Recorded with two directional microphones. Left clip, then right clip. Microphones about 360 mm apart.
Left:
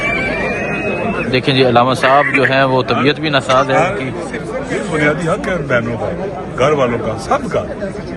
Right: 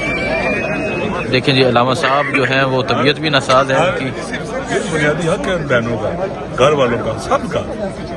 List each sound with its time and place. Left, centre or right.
1.3 s speech: centre
4.9 s speech: centre